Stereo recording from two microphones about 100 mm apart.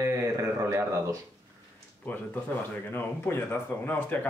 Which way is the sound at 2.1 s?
15° left (ahead or behind).